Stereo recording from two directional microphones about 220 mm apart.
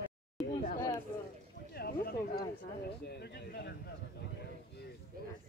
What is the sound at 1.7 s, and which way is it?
Speech, 45° left (ahead or behind).